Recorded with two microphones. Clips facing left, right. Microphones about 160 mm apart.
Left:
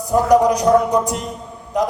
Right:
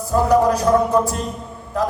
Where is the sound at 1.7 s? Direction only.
15° left (ahead or behind).